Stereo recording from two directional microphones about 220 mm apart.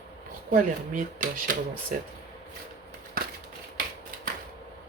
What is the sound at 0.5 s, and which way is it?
Speech, 35° right (ahead or behind).